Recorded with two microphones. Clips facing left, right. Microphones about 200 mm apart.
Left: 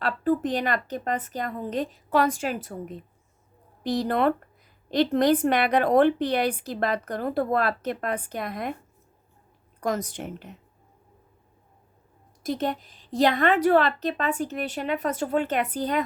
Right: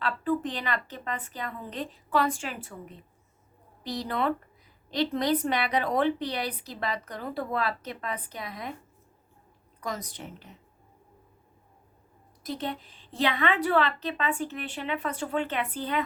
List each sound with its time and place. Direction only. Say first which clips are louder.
0.0 s a woman's voice: left 4 dB; 45° left (ahead or behind)
3.8 s a woman's voice: left 6 dB; 50° left (ahead or behind)
9.8 s a woman's voice: left 8 dB; 50° left (ahead or behind)
12.4 s a woman's voice: left 6 dB; 45° left (ahead or behind)